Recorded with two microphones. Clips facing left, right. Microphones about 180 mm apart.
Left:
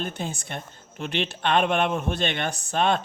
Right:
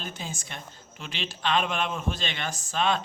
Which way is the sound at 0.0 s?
60° left (ahead or behind).